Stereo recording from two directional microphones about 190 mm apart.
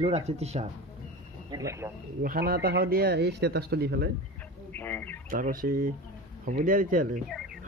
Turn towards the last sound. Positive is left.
turn(degrees=-45)  # may be behind; listen again after turning